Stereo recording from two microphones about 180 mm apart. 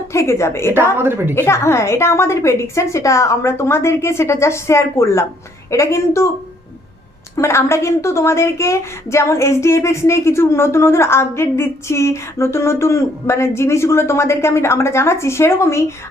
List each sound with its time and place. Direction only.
0.1 s a woman's voice: 15° left (ahead or behind)
0.9 s a woman's voice: 15° right (ahead or behind)
1.4 s a woman's voice: 15° left (ahead or behind)
7.3 s a woman's voice: 15° left (ahead or behind)